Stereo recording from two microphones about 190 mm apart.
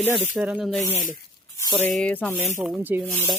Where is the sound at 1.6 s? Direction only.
15° left (ahead or behind).